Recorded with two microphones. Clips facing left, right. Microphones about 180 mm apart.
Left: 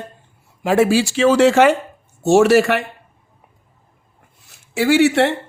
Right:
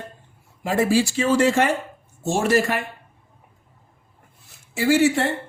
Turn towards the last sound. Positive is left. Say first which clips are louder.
# left 4 dB
turn(degrees=75)  # may be behind; listen again after turning